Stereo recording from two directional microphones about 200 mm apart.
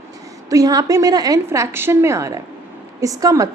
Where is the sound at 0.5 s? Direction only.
20° right (ahead or behind).